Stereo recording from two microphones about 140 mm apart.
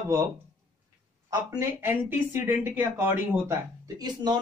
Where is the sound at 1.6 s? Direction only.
15° right (ahead or behind).